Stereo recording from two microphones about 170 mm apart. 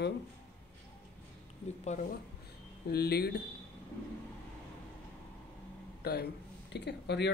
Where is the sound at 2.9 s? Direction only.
70° left (ahead or behind).